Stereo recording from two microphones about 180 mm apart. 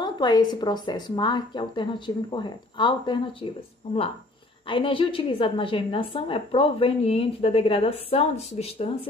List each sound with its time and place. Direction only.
0.0 s a woman's voice: 25° left (ahead or behind)
4.6 s a woman's voice: 30° left (ahead or behind)